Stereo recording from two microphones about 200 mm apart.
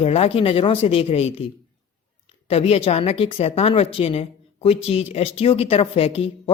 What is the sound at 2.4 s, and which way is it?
A woman's voice, 30° left (ahead or behind).